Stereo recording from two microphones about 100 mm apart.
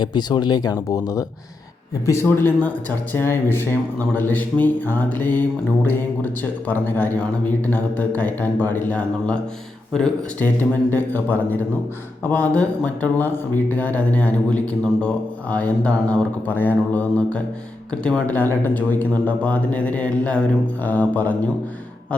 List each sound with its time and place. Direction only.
0.0 s speech: 45° left (ahead or behind); by 10.1 s 5° left (ahead or behind)
10.4 s speech: 20° left (ahead or behind)